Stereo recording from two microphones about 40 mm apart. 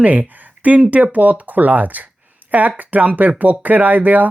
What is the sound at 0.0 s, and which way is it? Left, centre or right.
Speech, right.